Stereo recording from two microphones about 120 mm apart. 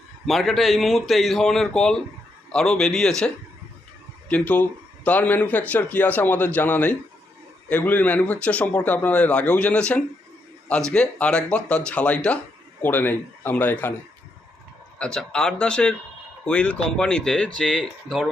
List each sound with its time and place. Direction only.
0.3 s a man's voice: centre (ahead or behind)
14.9 s speech: 5° left (ahead or behind)